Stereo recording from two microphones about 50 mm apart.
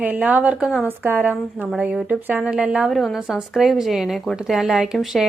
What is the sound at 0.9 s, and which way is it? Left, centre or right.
Speech, right.